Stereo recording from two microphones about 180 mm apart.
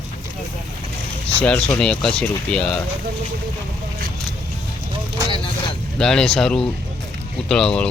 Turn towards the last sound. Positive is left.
turn(degrees=5)  # may be behind; listen again after turning